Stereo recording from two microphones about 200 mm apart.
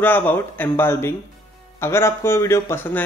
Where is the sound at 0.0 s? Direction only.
10° left (ahead or behind).